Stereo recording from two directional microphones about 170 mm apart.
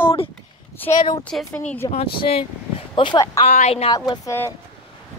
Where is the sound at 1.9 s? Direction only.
35° left (ahead or behind).